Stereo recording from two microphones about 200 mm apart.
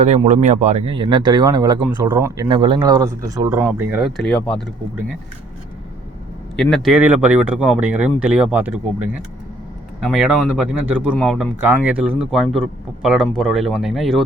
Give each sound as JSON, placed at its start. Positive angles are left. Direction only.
{"t": 0.0, "sound": "speech", "side_deg": -30}
{"t": 6.6, "sound": "speech", "side_deg": 0}
{"t": 10.0, "sound": "speech", "side_deg": -5}
{"t": 11.6, "sound": "speech", "side_deg": -10}